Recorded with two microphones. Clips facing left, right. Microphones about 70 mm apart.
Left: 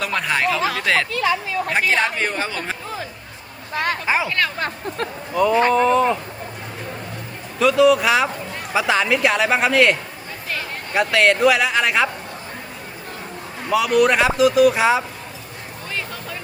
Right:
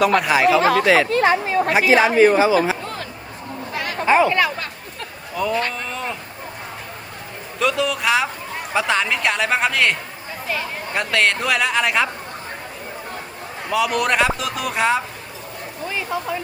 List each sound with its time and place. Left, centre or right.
0.0 s speech: centre
1.1 s chatter: right
1.7 s speech: centre
2.8 s a sound: centre
4.3 s speech: centre
5.3 s speech: centre
7.6 s speech: centre
13.7 s speech: centre